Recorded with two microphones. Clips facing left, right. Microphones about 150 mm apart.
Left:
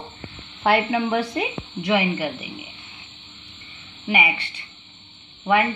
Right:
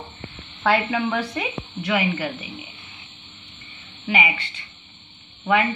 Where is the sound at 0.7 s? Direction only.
10° left (ahead or behind).